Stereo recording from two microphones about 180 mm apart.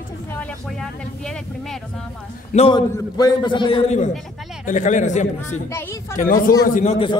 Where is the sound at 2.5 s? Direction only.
35° left (ahead or behind).